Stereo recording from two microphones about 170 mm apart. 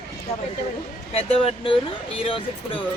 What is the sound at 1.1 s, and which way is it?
A woman's voice, 35° left (ahead or behind).